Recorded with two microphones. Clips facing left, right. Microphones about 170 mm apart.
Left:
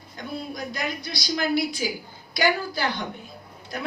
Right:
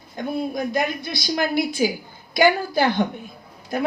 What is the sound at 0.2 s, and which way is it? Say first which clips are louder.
Speech: right 8 dB; 50° right (ahead or behind).